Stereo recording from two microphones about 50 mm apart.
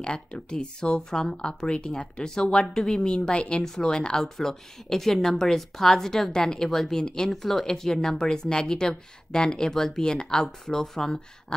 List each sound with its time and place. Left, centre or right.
0.0 s speech: centre